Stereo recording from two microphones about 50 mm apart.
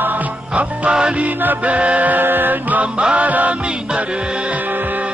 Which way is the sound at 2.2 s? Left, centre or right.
Right.